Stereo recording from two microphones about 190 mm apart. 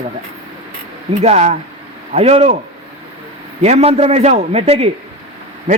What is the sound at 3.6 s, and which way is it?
Speech, 35° right (ahead or behind).